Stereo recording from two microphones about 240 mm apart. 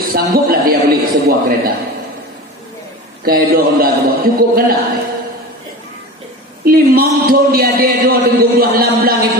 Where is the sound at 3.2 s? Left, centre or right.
Right.